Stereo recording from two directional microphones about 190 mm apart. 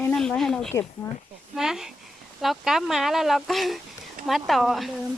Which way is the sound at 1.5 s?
Centre (ahead or behind).